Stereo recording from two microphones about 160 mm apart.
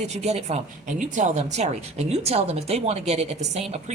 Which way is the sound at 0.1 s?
40° right (ahead or behind).